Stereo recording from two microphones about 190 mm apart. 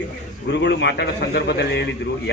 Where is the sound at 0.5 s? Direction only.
65° left (ahead or behind).